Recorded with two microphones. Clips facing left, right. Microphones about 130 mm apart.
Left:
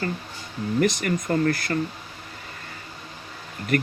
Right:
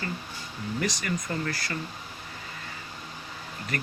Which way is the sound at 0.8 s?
50° left (ahead or behind).